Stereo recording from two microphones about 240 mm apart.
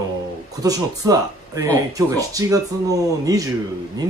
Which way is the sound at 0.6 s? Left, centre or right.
Centre.